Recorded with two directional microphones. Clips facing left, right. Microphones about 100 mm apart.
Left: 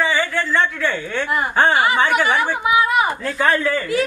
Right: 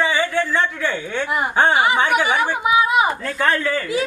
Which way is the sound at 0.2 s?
10° right (ahead or behind).